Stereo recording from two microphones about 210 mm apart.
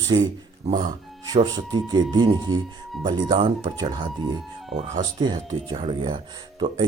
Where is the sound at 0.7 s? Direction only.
20° right (ahead or behind).